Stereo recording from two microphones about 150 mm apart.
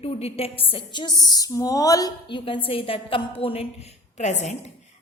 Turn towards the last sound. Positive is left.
turn(degrees=50)  # may be behind; listen again after turning